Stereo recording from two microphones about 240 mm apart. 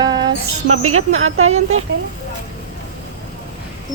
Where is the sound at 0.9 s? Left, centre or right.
Right.